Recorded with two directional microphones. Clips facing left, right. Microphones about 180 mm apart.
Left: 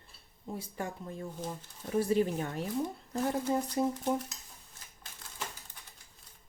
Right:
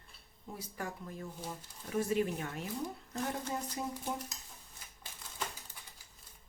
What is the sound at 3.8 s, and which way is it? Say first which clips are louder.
Speech: left 11 dB; 40° left (ahead or behind).